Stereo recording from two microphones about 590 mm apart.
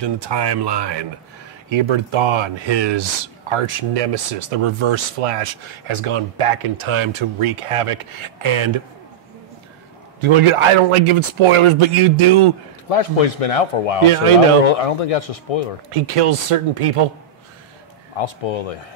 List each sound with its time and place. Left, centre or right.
0.0 s speech: right
10.2 s speech: right
12.9 s a man's voice: left
14.0 s speech: right
14.7 s a man's voice: left
15.9 s speech: right
18.1 s a man's voice: left